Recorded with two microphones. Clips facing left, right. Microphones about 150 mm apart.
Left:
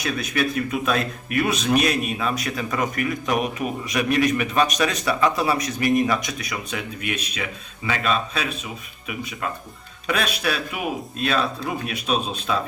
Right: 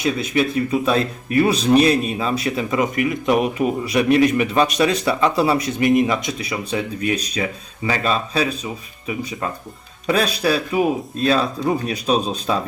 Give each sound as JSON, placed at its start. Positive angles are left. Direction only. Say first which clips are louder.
{"t": 0.0, "sound": "speech", "louder": "right 5 dB", "side_deg": -25}
{"t": 10.1, "sound": "speech", "louder": "right 6 dB", "side_deg": -35}